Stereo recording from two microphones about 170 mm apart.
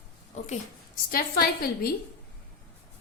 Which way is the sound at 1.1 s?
60° left (ahead or behind).